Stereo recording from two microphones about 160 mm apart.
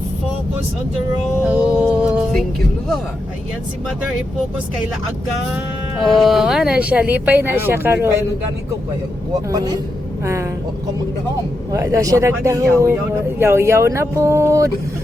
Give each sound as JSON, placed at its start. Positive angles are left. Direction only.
{"t": 1.5, "sound": "music", "side_deg": -5}
{"t": 6.0, "sound": "speech", "side_deg": 0}
{"t": 9.5, "sound": "speech", "side_deg": -25}
{"t": 11.7, "sound": "speech", "side_deg": -20}